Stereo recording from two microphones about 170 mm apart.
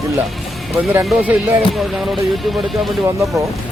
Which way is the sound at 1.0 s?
10° right (ahead or behind).